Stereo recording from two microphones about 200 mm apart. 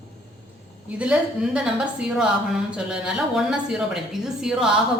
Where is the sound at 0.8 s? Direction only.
5° right (ahead or behind).